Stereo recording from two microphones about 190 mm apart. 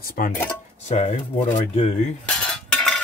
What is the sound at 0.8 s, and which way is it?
Speech, 35° left (ahead or behind).